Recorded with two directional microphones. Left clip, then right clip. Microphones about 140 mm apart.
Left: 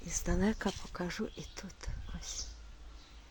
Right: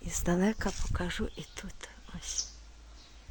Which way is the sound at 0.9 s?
Centre (ahead or behind).